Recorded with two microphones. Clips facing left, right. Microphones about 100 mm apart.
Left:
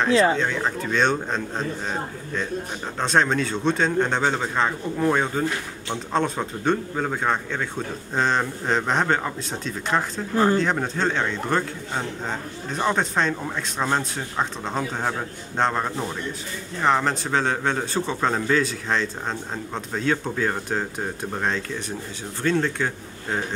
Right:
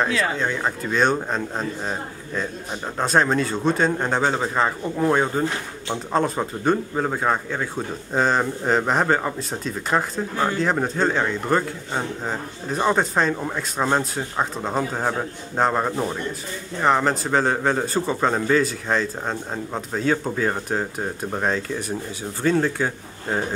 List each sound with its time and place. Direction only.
0.1 s speech: 30° left (ahead or behind)
0.4 s a man's voice: 5° right (ahead or behind)